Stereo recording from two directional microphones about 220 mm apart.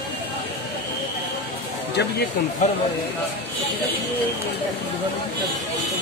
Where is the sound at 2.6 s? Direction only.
35° left (ahead or behind).